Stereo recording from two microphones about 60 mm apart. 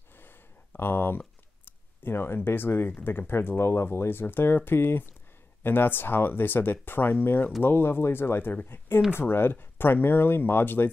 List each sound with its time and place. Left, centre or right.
0.7 s speech: left